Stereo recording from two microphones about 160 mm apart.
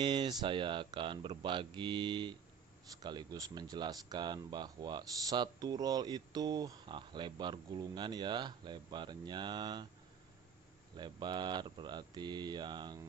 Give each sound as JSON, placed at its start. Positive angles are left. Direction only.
{"t": 0.0, "sound": "speech", "side_deg": -30}
{"t": 11.0, "sound": "speech", "side_deg": -30}